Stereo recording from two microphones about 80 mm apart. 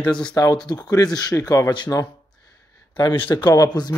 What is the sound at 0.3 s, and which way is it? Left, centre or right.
A man's voice, left.